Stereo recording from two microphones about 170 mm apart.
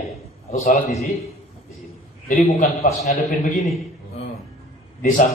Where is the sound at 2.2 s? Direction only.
50° left (ahead or behind).